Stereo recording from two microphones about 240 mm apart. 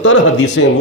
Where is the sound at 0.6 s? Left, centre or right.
Left.